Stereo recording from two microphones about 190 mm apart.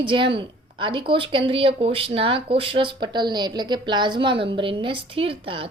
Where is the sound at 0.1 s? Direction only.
25° right (ahead or behind).